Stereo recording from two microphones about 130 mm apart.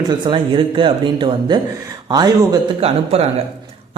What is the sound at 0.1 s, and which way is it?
Speech, 40° right (ahead or behind).